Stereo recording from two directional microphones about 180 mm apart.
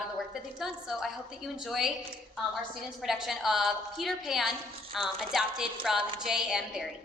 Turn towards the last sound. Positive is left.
turn(degrees=-5)  # may be behind; listen again after turning